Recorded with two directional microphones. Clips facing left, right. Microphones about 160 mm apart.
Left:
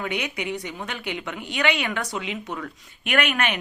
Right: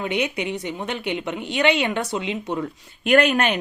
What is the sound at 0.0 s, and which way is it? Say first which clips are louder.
A woman's voice: right 4 dB; 25° right (ahead or behind).